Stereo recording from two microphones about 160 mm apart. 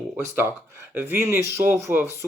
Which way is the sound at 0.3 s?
15° right (ahead or behind).